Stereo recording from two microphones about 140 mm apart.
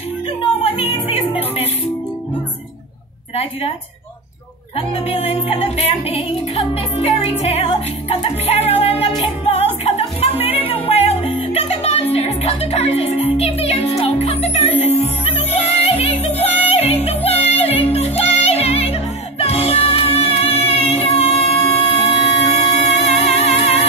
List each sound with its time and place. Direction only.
1.0 s music: 45° left (ahead or behind)
4.7 s music: 45° left (ahead or behind)